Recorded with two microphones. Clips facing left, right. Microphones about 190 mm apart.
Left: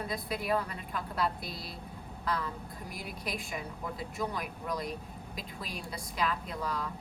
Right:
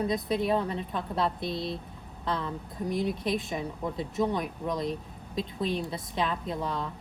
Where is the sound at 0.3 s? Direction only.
25° right (ahead or behind).